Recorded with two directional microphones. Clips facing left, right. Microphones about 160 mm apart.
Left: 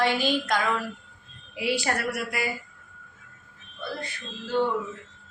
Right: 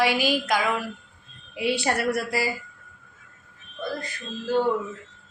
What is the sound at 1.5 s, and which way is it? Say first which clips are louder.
Speech: right 2 dB; 25° right (ahead or behind).